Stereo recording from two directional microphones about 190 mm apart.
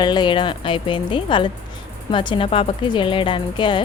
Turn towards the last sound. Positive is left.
turn(degrees=25)  # may be behind; listen again after turning